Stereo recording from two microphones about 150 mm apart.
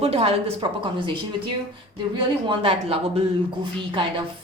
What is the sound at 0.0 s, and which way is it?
Speech, 40° right (ahead or behind).